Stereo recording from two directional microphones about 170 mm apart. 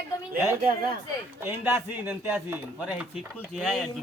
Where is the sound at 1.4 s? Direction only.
10° right (ahead or behind).